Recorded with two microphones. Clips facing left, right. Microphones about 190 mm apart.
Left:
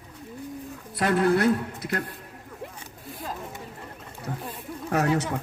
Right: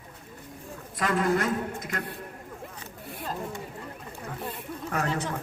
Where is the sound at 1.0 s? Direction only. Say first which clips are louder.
Left 4 dB; 70° left (ahead or behind).